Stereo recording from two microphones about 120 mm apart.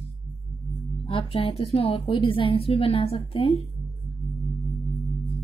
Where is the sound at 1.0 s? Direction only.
50° left (ahead or behind).